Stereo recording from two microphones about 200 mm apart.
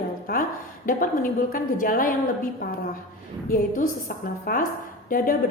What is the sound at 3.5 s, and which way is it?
A woman's voice, 40° left (ahead or behind).